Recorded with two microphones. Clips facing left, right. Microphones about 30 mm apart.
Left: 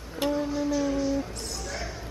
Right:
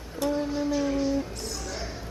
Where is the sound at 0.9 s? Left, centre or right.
Centre.